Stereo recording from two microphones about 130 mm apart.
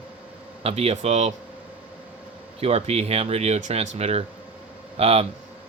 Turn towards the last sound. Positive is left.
turn(degrees=-50)  # may be behind; listen again after turning